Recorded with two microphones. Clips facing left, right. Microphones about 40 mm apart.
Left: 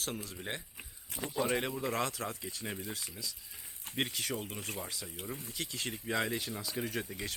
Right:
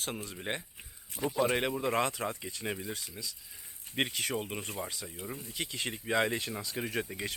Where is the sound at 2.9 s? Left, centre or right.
Centre.